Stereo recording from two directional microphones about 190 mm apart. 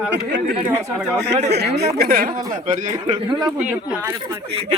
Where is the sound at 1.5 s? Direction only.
60° right (ahead or behind).